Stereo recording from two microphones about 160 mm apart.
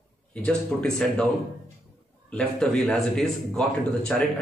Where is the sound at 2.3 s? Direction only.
5° left (ahead or behind).